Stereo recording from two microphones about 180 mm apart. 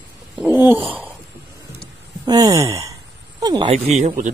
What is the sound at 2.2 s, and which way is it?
Speech, 20° right (ahead or behind).